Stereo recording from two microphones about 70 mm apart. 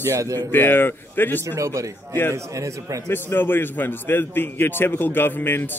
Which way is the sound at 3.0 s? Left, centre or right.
Left.